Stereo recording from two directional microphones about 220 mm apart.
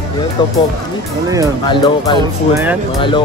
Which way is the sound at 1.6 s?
20° left (ahead or behind).